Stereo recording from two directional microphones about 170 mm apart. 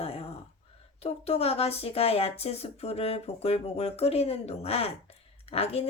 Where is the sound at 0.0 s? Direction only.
35° left (ahead or behind).